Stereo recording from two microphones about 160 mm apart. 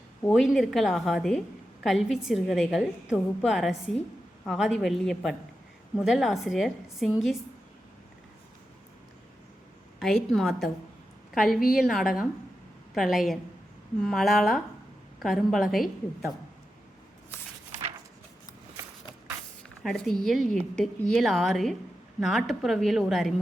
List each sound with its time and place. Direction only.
0.3 s a woman's voice: centre (ahead or behind)
10.0 s a woman's voice: centre (ahead or behind)
19.8 s a woman's voice: centre (ahead or behind)